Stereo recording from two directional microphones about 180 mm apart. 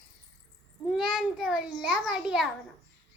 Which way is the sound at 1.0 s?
5° right (ahead or behind).